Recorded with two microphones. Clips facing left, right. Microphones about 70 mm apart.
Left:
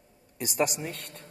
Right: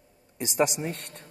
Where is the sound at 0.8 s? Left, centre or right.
Right.